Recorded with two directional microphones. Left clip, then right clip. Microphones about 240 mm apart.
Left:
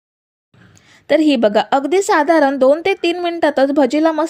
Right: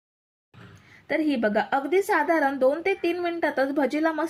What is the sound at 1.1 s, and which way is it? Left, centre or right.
A woman's voice, left.